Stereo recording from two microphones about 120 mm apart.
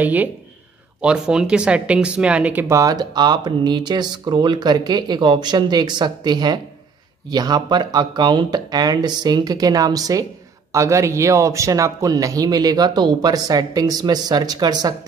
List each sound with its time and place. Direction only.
0.0 s speech: 15° right (ahead or behind)
2.7 s speech: 30° right (ahead or behind)